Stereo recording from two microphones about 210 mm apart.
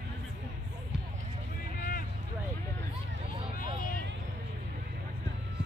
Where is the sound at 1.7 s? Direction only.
45° left (ahead or behind).